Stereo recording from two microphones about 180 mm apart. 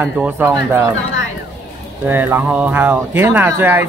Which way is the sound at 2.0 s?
10° right (ahead or behind).